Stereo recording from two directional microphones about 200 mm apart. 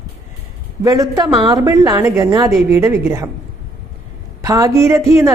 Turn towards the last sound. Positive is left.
turn(degrees=-15)  # may be behind; listen again after turning